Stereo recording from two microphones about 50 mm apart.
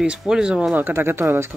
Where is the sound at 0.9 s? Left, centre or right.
Right.